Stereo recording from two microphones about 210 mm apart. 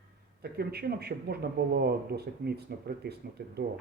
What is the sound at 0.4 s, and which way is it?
Speech, 50° right (ahead or behind).